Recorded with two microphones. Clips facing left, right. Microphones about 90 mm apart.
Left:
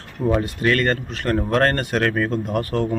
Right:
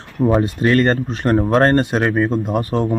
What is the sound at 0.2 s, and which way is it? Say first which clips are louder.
Speech: right 5 dB; 30° right (ahead or behind).